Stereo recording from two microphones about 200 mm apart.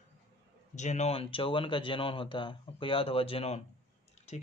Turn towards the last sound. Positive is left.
turn(degrees=35)  # may be behind; listen again after turning